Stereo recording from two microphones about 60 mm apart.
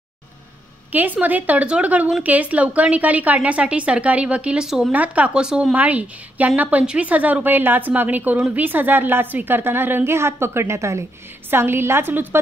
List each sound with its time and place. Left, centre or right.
0.9 s a woman's voice: right
4.6 s speech: centre
4.9 s a woman's voice: right
5.8 s a woman's voice: right
11.5 s a woman's voice: right